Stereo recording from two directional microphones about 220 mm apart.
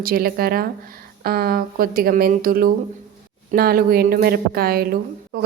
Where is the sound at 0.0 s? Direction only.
45° right (ahead or behind).